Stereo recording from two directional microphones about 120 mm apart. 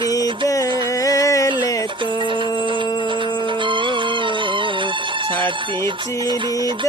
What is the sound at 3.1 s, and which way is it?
Music, 45° right (ahead or behind).